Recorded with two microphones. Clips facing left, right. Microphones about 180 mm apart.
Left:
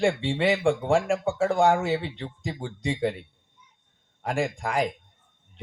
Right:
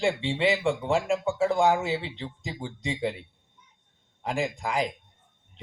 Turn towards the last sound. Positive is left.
turn(degrees=50)  # may be behind; listen again after turning